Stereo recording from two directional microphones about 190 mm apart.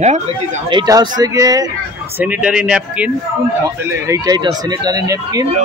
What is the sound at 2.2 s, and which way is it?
Speech, 5° right (ahead or behind).